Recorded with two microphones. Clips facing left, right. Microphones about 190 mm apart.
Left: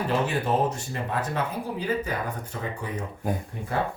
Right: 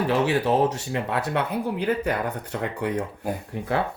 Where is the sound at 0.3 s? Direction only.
75° right (ahead or behind).